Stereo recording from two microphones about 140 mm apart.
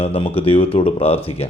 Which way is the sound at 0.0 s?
40° left (ahead or behind).